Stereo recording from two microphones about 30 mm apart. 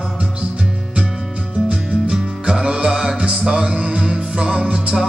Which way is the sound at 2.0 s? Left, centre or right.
Right.